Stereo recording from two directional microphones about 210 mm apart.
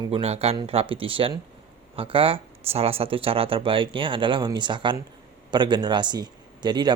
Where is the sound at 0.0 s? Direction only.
25° right (ahead or behind).